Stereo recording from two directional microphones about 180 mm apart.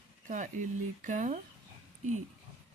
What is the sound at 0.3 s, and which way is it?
Speech, 45° right (ahead or behind).